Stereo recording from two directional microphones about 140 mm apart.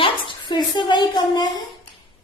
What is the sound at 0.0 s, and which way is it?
A woman's voice, 35° left (ahead or behind).